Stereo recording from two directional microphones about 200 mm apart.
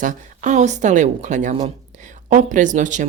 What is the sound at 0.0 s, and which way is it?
Speech, 40° right (ahead or behind).